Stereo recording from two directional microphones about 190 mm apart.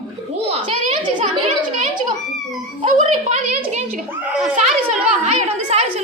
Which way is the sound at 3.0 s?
40° right (ahead or behind).